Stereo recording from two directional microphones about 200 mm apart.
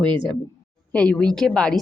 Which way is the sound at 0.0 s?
25° right (ahead or behind).